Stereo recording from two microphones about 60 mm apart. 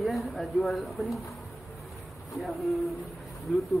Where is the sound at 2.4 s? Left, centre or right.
Centre.